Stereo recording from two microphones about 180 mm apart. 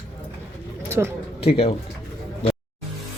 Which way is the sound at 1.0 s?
10° right (ahead or behind).